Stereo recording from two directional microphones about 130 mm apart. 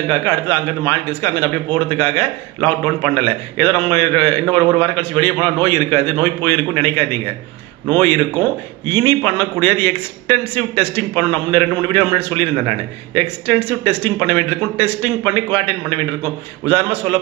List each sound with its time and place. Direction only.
0.2 s a man's voice: 20° left (ahead or behind)
9.0 s a man's voice: 15° left (ahead or behind)